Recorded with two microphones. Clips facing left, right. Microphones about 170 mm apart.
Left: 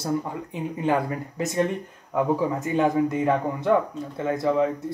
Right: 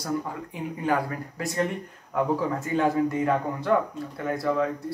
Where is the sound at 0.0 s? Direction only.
20° left (ahead or behind).